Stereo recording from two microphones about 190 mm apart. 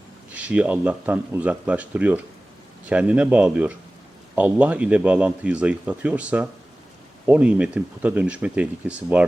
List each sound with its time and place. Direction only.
0.3 s speech: 5° right (ahead or behind)